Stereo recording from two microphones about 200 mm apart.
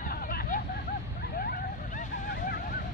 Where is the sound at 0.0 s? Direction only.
45° left (ahead or behind).